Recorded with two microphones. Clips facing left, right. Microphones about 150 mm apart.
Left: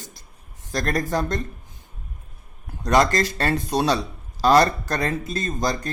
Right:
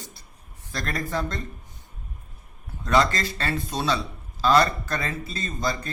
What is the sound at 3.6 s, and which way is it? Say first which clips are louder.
Speech: left 6 dB; 70° left (ahead or behind).